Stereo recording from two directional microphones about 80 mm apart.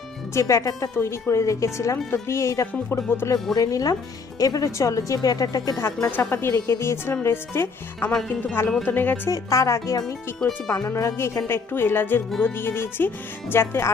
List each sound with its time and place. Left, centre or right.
0.3 s a woman's voice: left
0.9 s speech: left
3.5 s a woman's voice: left
6.1 s speech: left
9.3 s a woman's voice: left
11.4 s speech: left